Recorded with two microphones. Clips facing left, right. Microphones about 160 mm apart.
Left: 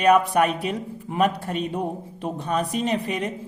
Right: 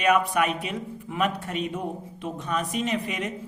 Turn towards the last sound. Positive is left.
turn(degrees=35)  # may be behind; listen again after turning